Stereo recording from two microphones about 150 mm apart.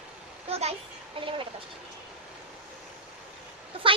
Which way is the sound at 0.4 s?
40° right (ahead or behind).